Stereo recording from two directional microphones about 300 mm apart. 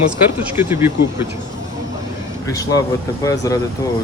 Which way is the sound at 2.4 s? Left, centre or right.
Centre.